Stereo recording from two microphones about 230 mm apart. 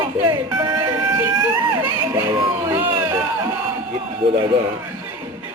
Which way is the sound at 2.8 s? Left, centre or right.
Centre.